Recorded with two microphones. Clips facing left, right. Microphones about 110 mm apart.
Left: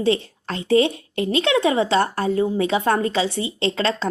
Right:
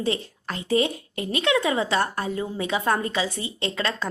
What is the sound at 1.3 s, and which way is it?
A woman's voice, 30° left (ahead or behind).